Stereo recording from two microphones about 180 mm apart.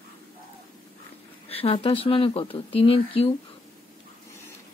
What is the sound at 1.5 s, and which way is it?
Speech, 30° left (ahead or behind).